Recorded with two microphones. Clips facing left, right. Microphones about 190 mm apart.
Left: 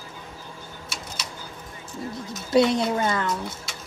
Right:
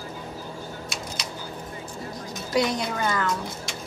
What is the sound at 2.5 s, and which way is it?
Speech, 25° left (ahead or behind).